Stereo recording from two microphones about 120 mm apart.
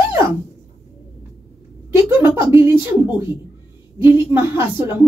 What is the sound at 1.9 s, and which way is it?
A woman's voice, 20° right (ahead or behind).